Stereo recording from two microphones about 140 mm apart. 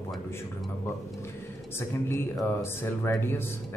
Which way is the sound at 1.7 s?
20° left (ahead or behind).